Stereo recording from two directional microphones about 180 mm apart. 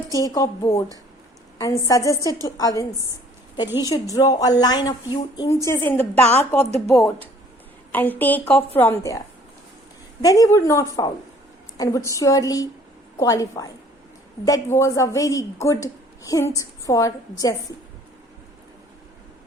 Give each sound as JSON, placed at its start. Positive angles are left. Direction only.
{"t": 0.1, "sound": "speech", "side_deg": 20}
{"t": 5.6, "sound": "a woman's voice", "side_deg": 15}